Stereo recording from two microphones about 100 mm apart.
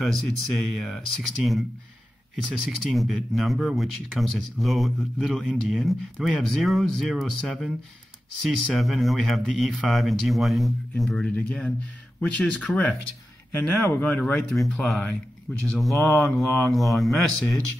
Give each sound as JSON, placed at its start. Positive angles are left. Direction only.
{"t": 0.0, "sound": "speech", "side_deg": 5}
{"t": 2.8, "sound": "speech", "side_deg": 0}
{"t": 14.1, "sound": "speech", "side_deg": 10}